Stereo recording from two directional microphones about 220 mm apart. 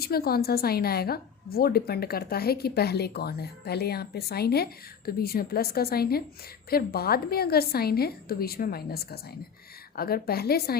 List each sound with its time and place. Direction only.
0.0 s a woman's voice: 45° left (ahead or behind)